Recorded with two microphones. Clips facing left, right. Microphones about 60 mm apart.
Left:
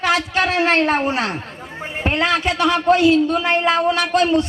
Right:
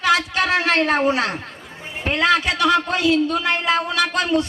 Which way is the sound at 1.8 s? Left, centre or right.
Left.